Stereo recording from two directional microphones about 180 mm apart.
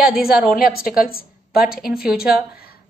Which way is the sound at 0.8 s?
55° left (ahead or behind).